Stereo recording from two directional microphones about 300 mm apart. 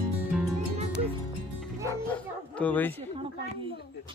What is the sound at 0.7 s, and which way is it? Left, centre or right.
Music, centre.